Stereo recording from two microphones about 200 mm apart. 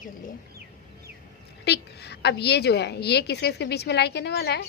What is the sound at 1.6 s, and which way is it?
A woman's voice, 55° left (ahead or behind).